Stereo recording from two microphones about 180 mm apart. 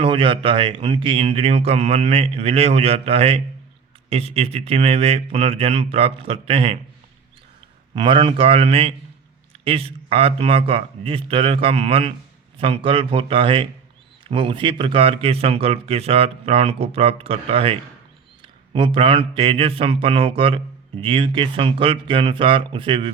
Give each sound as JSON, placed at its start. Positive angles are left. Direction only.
{"t": 0.0, "sound": "speech", "side_deg": -30}
{"t": 7.9, "sound": "speech", "side_deg": -25}